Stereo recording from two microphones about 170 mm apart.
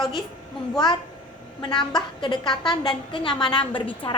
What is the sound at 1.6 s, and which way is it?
Speech, 25° left (ahead or behind).